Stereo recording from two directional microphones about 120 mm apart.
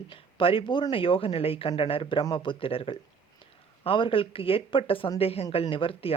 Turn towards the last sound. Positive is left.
turn(degrees=50)  # may be behind; listen again after turning